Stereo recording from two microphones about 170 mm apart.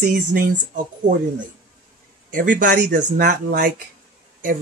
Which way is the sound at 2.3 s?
50° right (ahead or behind).